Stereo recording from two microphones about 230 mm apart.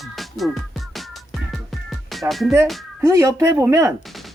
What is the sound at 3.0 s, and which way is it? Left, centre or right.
Speech, centre.